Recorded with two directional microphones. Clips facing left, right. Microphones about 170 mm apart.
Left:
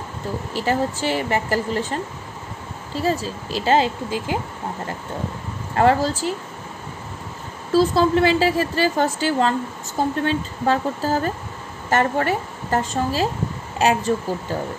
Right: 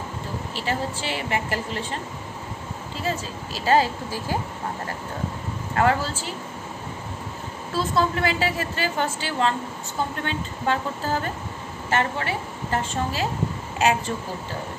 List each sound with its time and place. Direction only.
0.7 s speech: 45° left (ahead or behind)
3.0 s speech: 35° left (ahead or behind)
5.8 s a woman's voice: 35° left (ahead or behind)
7.7 s a woman's voice: 35° left (ahead or behind)